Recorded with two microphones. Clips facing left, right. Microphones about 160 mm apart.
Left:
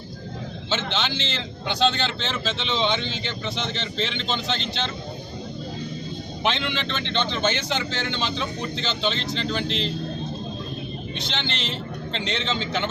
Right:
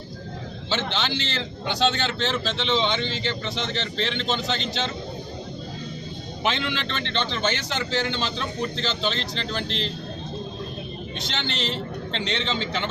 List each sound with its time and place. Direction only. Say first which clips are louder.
0.7 s a man's voice: even; centre (ahead or behind)
6.4 s a man's voice: even; centre (ahead or behind)
11.3 s a man's voice: right 2 dB; centre (ahead or behind)